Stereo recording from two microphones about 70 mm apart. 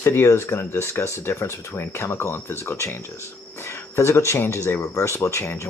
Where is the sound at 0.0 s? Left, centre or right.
Left.